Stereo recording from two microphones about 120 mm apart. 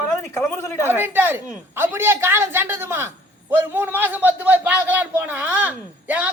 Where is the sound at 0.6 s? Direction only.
20° left (ahead or behind).